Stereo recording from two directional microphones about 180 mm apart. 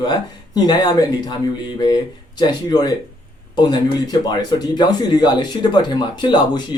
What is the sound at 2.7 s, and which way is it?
Speech, 20° left (ahead or behind).